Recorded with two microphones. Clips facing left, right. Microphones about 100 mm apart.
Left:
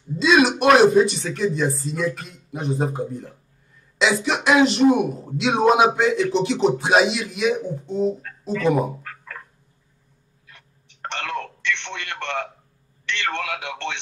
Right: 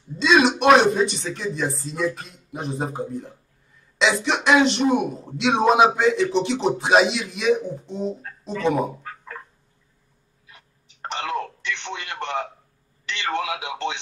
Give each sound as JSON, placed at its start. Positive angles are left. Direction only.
{"t": 0.2, "sound": "speech", "side_deg": 5}
{"t": 9.0, "sound": "a sound", "side_deg": -25}
{"t": 10.5, "sound": "telephone", "side_deg": -15}
{"t": 13.1, "sound": "a man's voice", "side_deg": -15}